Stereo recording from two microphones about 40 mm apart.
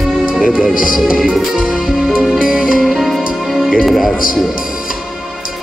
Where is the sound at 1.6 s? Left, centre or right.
Centre.